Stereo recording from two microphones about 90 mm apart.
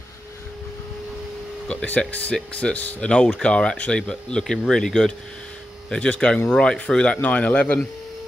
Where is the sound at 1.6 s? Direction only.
15° left (ahead or behind).